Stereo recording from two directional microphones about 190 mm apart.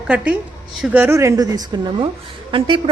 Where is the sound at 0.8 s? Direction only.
5° right (ahead or behind).